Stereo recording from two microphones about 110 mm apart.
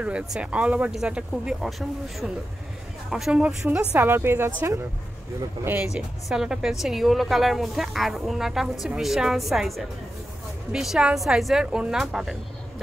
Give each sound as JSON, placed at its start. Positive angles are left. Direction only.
{"t": 0.0, "sound": "a woman's voice", "side_deg": -10}
{"t": 5.9, "sound": "a woman's voice", "side_deg": -5}